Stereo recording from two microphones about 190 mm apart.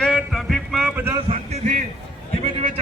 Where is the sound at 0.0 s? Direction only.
Centre (ahead or behind).